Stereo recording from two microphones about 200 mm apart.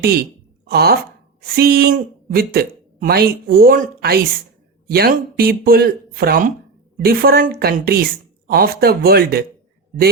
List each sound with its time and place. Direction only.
0.0 s a woman's voice: 50° right (ahead or behind)